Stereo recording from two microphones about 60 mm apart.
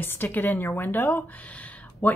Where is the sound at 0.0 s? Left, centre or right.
Left.